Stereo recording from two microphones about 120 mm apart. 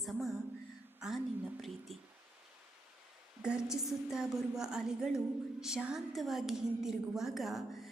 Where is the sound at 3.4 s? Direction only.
5° right (ahead or behind).